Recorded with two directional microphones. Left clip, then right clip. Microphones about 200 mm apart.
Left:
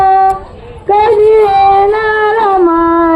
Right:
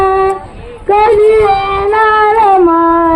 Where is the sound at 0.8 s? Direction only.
50° right (ahead or behind).